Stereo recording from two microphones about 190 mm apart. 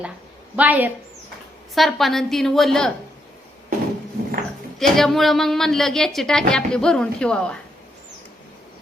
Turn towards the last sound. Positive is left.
turn(degrees=5)  # may be behind; listen again after turning